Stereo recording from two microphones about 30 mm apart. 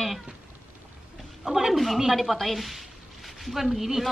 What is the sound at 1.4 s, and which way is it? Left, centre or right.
Speech, centre.